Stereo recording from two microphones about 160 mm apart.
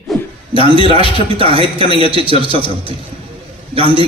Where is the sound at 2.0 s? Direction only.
35° right (ahead or behind).